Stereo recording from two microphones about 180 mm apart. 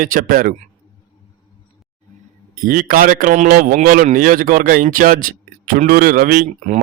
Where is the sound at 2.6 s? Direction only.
50° right (ahead or behind).